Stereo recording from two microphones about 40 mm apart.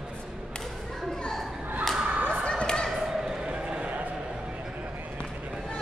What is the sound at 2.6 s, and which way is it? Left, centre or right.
Thump, left.